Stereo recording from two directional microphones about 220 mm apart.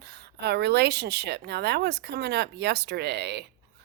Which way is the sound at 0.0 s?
45° right (ahead or behind).